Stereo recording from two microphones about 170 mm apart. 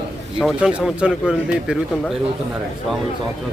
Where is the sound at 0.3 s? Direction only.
5° right (ahead or behind).